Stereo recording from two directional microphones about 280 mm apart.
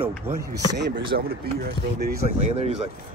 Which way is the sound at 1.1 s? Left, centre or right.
Right.